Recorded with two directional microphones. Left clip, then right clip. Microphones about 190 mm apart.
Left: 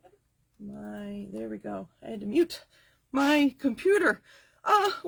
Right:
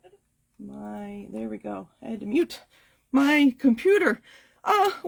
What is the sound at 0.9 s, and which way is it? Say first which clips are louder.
Speech: right 3 dB; 25° right (ahead or behind).